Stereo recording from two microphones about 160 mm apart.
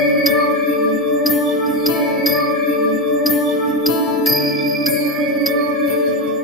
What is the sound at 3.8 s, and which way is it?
Music, centre (ahead or behind).